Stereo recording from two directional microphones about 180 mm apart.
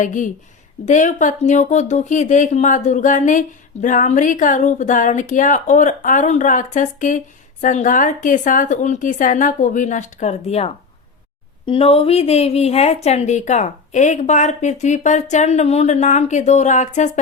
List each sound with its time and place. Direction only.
0.0 s a woman's voice: 45° left (ahead or behind)